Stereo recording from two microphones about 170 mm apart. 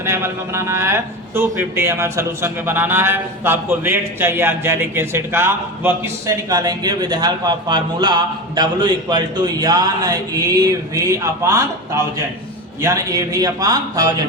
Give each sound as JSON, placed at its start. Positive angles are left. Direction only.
{"t": 0.0, "sound": "a man's voice", "side_deg": -15}
{"t": 12.8, "sound": "a man's voice", "side_deg": -20}